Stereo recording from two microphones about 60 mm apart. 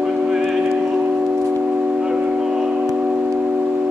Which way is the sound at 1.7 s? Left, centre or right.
Right.